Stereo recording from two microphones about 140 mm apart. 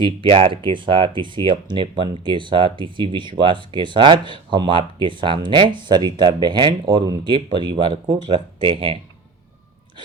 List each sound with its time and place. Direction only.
0.0 s speech: 40° right (ahead or behind)